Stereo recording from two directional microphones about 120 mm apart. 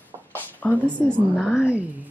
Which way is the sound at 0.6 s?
10° left (ahead or behind).